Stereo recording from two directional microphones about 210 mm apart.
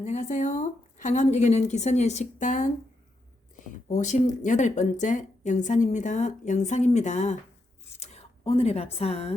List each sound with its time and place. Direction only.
0.0 s speech: 35° left (ahead or behind)
3.8 s speech: 35° left (ahead or behind)